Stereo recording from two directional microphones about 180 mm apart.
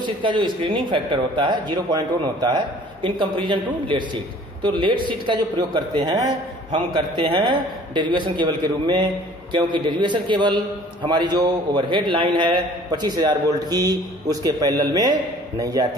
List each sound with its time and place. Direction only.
0.0 s a man's voice: 25° right (ahead or behind)